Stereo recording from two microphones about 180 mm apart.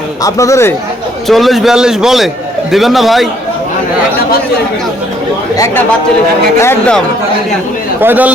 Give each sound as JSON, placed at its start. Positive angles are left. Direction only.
{"t": 0.2, "sound": "speech", "side_deg": 20}
{"t": 1.3, "sound": "a man's voice", "side_deg": 0}
{"t": 6.6, "sound": "speech", "side_deg": 15}
{"t": 8.0, "sound": "a man's voice", "side_deg": -10}